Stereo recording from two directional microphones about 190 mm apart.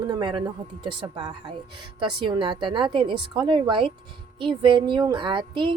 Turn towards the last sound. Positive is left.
turn(degrees=-25)  # may be behind; listen again after turning